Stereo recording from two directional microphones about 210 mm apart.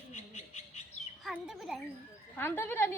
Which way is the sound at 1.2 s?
Centre (ahead or behind).